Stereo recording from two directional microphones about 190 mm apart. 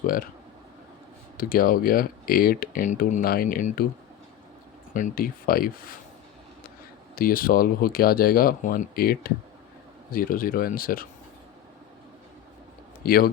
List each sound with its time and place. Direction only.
1.4 s speech: 50° left (ahead or behind)
4.9 s speech: 45° left (ahead or behind)
7.2 s speech: 50° left (ahead or behind)
13.0 s speech: 50° left (ahead or behind)